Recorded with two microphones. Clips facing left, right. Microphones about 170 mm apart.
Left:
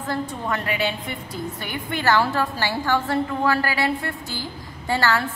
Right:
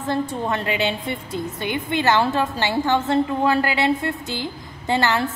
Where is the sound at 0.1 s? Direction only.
25° right (ahead or behind).